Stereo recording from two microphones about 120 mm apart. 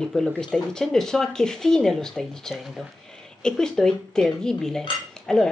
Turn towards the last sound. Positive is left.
turn(degrees=5)  # may be behind; listen again after turning